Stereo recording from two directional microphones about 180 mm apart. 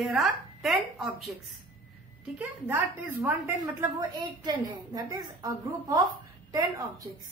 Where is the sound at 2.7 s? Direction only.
10° right (ahead or behind).